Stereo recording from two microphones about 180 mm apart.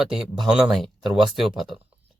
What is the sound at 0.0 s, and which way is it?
Speech, 5° right (ahead or behind).